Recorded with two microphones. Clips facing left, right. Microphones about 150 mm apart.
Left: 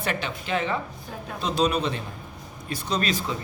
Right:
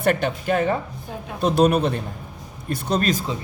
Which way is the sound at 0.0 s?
50° right (ahead or behind).